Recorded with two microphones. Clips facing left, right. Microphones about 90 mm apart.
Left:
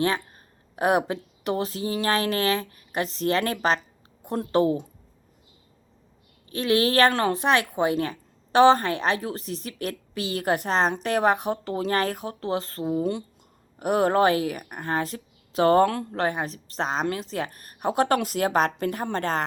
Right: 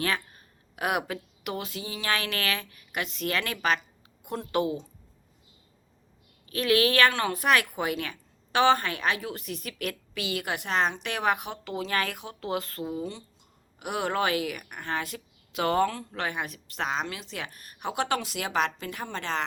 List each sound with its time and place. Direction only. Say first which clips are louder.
0.0 s speech: left 5 dB; 30° left (ahead or behind)
6.5 s speech: left 2 dB; 25° left (ahead or behind)
13.0 s speech: left 9 dB; 55° left (ahead or behind)
13.7 s speech: left 8 dB; 40° left (ahead or behind)